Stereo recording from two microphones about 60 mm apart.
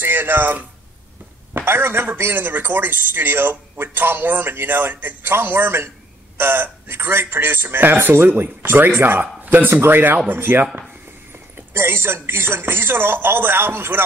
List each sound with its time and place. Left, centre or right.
0.0 s a man's voice: right